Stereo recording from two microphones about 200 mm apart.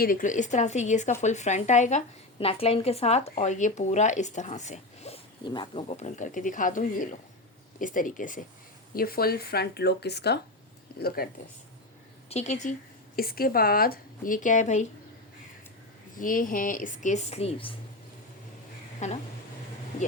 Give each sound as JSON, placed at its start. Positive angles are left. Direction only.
{"t": 0.0, "sound": "speech", "side_deg": 45}
{"t": 12.3, "sound": "speech", "side_deg": 35}
{"t": 13.1, "sound": "speech", "side_deg": 50}
{"t": 16.1, "sound": "speech", "side_deg": 45}
{"t": 18.9, "sound": "speech", "side_deg": 35}